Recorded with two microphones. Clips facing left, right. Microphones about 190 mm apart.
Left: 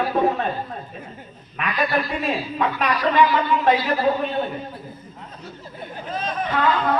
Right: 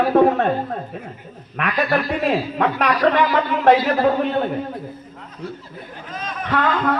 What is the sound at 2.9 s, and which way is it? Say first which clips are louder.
A man's voice: even; 45° right (ahead or behind).